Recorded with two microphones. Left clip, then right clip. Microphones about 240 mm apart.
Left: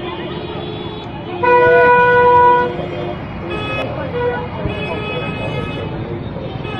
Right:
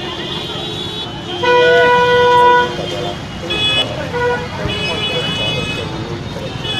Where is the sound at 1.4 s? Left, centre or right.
Right.